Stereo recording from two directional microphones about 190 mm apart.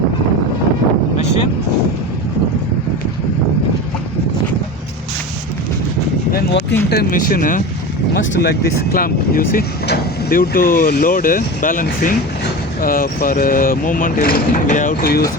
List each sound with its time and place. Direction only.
6.3 s a sound: 65° left (ahead or behind)
6.9 s speech: 50° left (ahead or behind)
8.1 s speech: 70° left (ahead or behind); by 15.3 s 50° left (ahead or behind)